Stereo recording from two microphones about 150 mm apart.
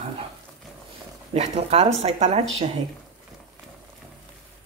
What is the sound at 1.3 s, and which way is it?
Speech, 45° right (ahead or behind).